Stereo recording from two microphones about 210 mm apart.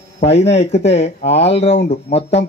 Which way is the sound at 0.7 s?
30° left (ahead or behind).